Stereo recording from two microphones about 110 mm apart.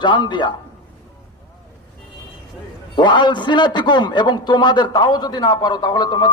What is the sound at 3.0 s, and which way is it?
A man's voice, 45° left (ahead or behind).